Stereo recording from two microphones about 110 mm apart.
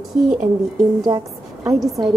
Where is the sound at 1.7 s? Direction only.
Centre (ahead or behind).